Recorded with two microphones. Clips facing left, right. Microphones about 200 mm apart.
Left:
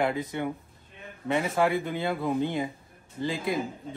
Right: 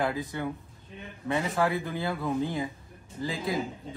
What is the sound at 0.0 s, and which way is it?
Speech, 20° left (ahead or behind).